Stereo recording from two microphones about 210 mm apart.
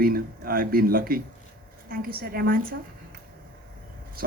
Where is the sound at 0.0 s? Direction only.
45° right (ahead or behind).